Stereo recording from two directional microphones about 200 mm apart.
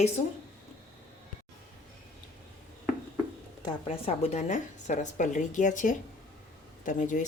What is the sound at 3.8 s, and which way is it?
A woman's voice, 30° left (ahead or behind).